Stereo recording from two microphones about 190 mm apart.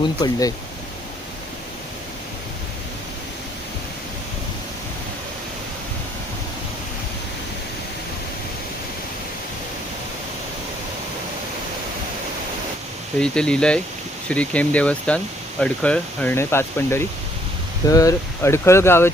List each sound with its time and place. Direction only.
0.0 s speech: 20° left (ahead or behind)
13.1 s speech: 5° left (ahead or behind)